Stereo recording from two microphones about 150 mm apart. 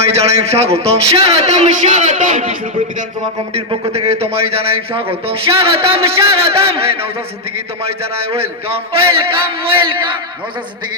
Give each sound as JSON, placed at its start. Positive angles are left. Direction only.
{"t": 0.0, "sound": "a man's voice", "side_deg": -45}
{"t": 3.5, "sound": "a man's voice", "side_deg": -40}